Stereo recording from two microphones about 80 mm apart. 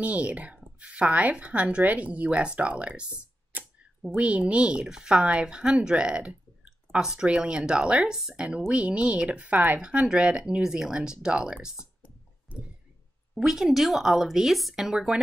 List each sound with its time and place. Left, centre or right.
0.0 s speech: centre
13.3 s speech: centre